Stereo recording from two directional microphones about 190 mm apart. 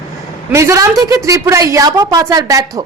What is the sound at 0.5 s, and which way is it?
A woman's voice, 15° right (ahead or behind).